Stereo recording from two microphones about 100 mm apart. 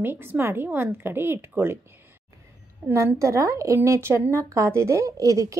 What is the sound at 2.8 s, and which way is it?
Speech, 25° right (ahead or behind).